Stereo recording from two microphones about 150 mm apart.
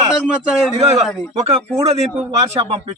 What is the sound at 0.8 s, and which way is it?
Speech, 45° right (ahead or behind).